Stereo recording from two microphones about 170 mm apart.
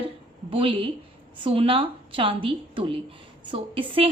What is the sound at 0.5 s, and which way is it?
A woman's voice, 30° right (ahead or behind).